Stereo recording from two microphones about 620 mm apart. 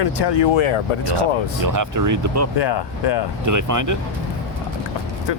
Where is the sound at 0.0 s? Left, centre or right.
Left.